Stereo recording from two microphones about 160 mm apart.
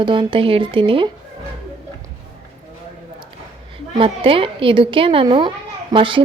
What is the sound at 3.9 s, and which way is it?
A woman's voice, 35° right (ahead or behind).